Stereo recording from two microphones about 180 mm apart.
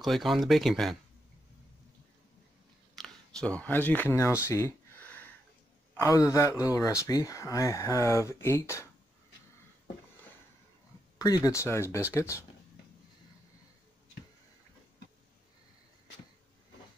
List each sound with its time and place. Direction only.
0.0 s speech: centre (ahead or behind)
3.0 s a sound: 5° left (ahead or behind)
5.9 s speech: 15° left (ahead or behind)
11.1 s speech: 20° left (ahead or behind)